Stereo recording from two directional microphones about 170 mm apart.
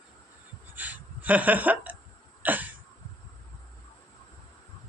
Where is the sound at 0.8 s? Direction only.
10° right (ahead or behind).